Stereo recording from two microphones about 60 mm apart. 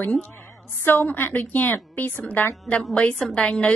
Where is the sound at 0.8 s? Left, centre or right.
Left.